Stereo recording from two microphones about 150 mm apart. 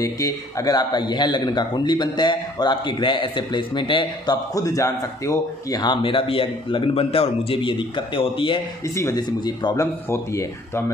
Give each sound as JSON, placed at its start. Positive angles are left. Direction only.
{"t": 0.0, "sound": "speech", "side_deg": 20}
{"t": 8.8, "sound": "speech", "side_deg": 20}
{"t": 10.0, "sound": "speech", "side_deg": 15}